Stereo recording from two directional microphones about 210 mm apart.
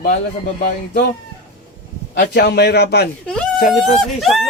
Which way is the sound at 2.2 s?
55° left (ahead or behind).